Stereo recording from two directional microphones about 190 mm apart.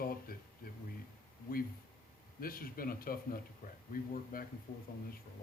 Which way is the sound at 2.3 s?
50° left (ahead or behind).